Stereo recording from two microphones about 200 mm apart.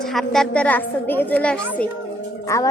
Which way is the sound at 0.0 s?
Centre (ahead or behind).